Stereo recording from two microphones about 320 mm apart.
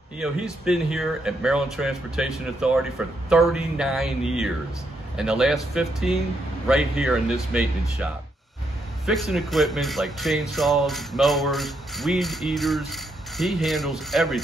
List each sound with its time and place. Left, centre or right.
0.7 s speech: centre
9.0 s speech: centre